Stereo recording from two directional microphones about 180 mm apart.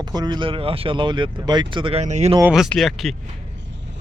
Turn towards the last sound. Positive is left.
turn(degrees=0)  # may be behind; listen again after turning